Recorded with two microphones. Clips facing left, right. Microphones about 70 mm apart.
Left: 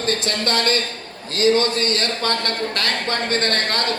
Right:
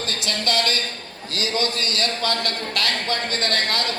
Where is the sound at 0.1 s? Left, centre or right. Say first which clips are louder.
Left 4 dB; left.